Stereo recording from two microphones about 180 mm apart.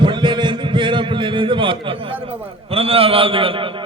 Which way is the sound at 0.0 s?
25° right (ahead or behind).